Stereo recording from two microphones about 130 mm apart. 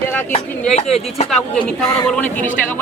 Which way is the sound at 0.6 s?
60° left (ahead or behind).